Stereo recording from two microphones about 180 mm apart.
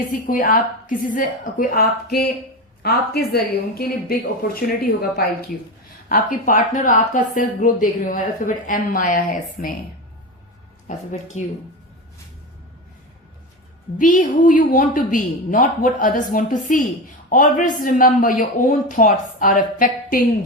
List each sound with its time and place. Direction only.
0.3 s a woman's voice: 50° left (ahead or behind)
6.1 s a woman's voice: 50° left (ahead or behind)
10.8 s speech: 40° left (ahead or behind)
14.0 s a woman's voice: 45° left (ahead or behind)